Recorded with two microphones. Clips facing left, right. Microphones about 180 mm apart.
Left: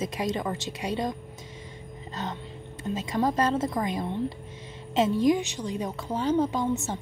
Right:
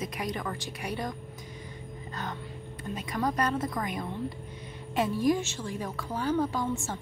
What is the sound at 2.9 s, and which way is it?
A woman's voice, 25° left (ahead or behind).